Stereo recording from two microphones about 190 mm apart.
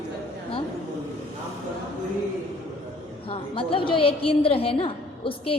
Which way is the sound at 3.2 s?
30° left (ahead or behind).